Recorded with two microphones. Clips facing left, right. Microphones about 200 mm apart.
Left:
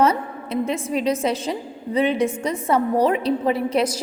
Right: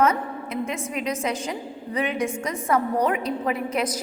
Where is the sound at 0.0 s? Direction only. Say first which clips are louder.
Left 2 dB; 30° left (ahead or behind).